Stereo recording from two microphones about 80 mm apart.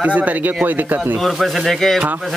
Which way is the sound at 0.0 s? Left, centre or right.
Centre.